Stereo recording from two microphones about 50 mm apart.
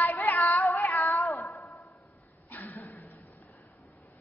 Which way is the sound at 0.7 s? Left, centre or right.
Left.